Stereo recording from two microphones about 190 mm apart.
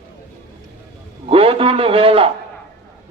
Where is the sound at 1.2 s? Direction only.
30° right (ahead or behind).